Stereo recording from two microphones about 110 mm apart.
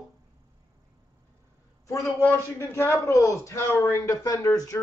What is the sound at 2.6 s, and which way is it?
Speech, 25° left (ahead or behind).